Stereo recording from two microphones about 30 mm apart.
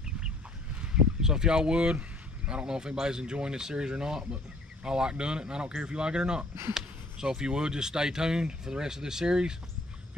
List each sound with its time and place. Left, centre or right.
1.2 s speech: right